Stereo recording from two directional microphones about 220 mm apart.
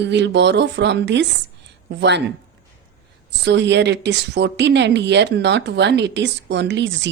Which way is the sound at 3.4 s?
55° right (ahead or behind).